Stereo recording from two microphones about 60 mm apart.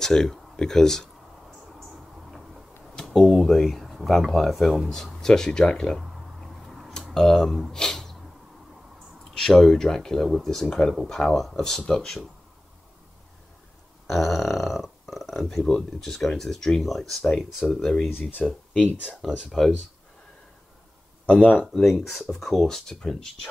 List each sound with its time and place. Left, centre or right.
0.0 s speech: centre
3.0 s speech: centre
6.9 s a sound: centre
9.3 s speech: centre
14.0 s a sound: centre
15.4 s speech: centre
17.5 s speech: centre
18.7 s speech: left
19.2 s speech: centre
21.8 s speech: centre